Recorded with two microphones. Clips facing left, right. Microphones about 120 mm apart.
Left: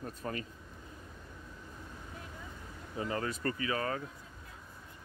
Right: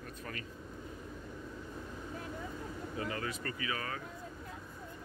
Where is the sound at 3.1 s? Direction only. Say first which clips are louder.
Left 4 dB; 40° left (ahead or behind).